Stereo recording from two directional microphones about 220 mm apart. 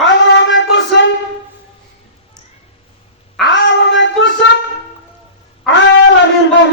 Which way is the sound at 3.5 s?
55° left (ahead or behind).